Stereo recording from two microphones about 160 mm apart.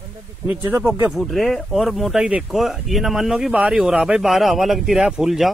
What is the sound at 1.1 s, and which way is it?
Speech, centre (ahead or behind).